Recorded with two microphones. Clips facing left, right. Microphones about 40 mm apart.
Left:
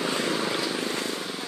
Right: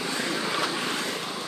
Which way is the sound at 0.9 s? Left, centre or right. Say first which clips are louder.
Even; right.